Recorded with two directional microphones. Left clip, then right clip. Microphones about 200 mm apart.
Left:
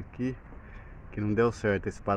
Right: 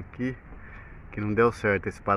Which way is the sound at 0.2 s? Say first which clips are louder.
Right 2 dB; 5° left (ahead or behind).